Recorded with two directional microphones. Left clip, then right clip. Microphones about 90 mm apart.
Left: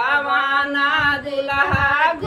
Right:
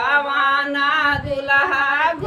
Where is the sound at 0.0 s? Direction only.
20° right (ahead or behind).